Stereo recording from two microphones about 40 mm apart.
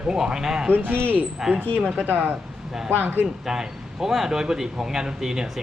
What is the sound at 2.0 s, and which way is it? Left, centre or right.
Speech, right.